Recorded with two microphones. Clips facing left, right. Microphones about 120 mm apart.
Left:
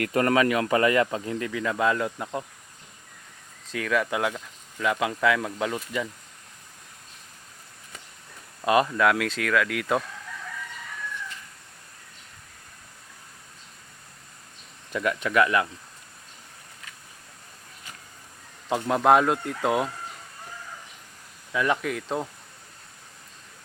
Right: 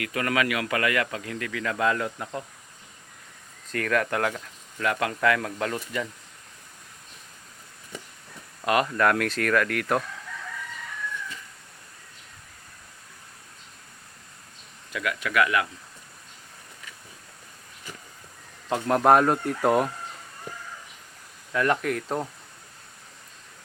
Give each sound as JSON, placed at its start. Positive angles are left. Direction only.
{"t": 0.0, "sound": "speech", "side_deg": 40}
{"t": 3.7, "sound": "speech", "side_deg": 5}
{"t": 8.9, "sound": "speech", "side_deg": 10}
{"t": 14.9, "sound": "speech", "side_deg": 30}
{"t": 18.9, "sound": "speech", "side_deg": 0}
{"t": 21.5, "sound": "speech", "side_deg": 5}